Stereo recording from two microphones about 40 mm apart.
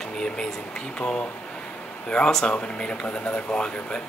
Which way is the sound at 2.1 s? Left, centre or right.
Centre.